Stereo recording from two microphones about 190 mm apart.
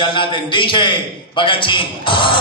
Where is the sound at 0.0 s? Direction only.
25° left (ahead or behind).